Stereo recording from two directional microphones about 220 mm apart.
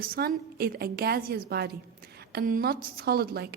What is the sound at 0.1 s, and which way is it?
A woman's voice, 45° right (ahead or behind).